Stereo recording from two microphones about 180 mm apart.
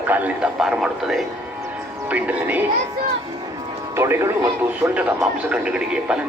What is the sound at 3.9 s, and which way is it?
A man's voice, 15° right (ahead or behind).